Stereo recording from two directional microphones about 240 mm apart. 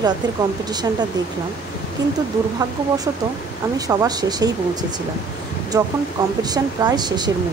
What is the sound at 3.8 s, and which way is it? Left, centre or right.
Speech, centre.